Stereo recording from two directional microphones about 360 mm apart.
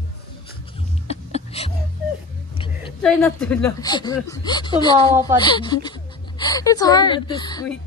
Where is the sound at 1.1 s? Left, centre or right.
Centre.